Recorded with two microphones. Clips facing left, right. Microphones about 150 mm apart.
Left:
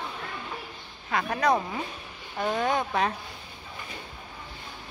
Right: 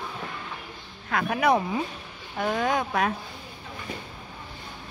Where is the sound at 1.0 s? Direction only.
Centre (ahead or behind).